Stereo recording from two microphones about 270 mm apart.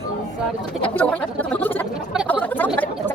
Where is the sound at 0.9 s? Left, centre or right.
Centre.